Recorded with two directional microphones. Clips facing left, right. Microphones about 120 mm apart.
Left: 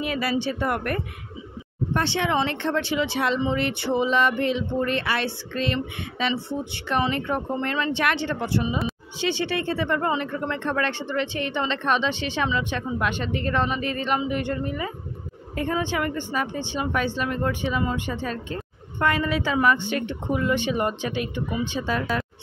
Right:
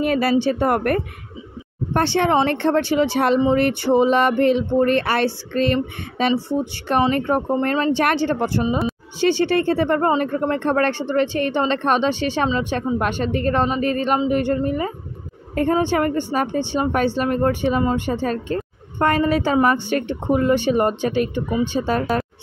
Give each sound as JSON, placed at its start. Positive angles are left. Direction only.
{"t": 0.0, "sound": "speech", "side_deg": -45}